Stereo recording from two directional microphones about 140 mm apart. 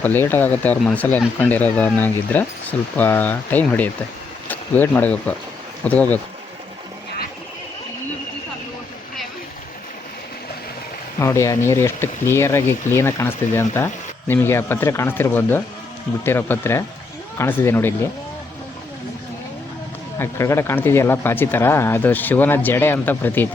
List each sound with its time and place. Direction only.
0.0 s speech: 15° left (ahead or behind)
11.2 s speech: 20° left (ahead or behind)
20.1 s speech: 20° left (ahead or behind)